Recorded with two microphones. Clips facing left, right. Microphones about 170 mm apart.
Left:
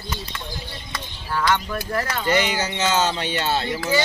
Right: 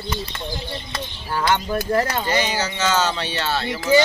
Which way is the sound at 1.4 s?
25° right (ahead or behind).